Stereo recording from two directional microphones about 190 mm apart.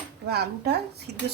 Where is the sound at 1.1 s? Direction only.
60° right (ahead or behind).